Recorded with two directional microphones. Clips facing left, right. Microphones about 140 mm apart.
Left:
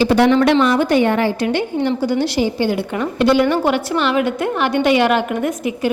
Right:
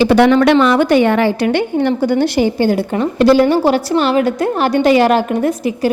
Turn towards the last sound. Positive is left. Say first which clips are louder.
# right 4 dB
turn(degrees=-35)  # may be behind; listen again after turning